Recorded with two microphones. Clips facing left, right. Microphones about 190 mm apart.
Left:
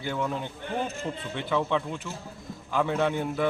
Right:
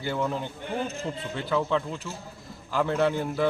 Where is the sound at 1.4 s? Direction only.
5° right (ahead or behind).